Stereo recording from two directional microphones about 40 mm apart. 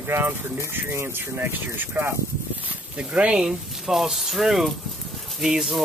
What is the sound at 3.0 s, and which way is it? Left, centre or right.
Speech, right.